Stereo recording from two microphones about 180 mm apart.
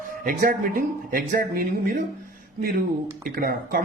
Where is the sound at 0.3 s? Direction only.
50° right (ahead or behind).